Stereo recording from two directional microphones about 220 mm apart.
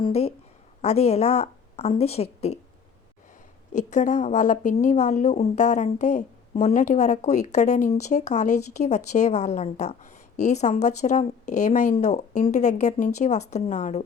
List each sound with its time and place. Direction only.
0.0 s a woman's voice: 30° left (ahead or behind)
3.7 s speech: 35° left (ahead or behind)